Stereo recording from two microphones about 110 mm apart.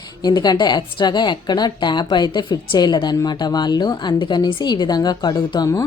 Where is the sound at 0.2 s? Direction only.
40° left (ahead or behind).